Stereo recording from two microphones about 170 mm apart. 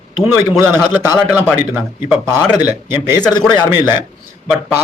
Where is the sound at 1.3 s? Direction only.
10° right (ahead or behind).